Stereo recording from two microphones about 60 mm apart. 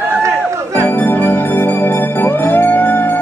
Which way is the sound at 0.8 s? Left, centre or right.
Left.